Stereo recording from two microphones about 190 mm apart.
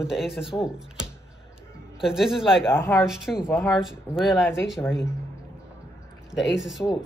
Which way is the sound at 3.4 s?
10° left (ahead or behind).